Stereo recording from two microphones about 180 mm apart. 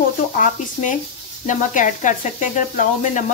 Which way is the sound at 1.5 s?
45° left (ahead or behind).